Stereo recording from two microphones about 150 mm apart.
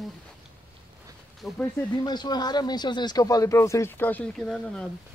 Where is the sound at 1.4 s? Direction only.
Centre (ahead or behind).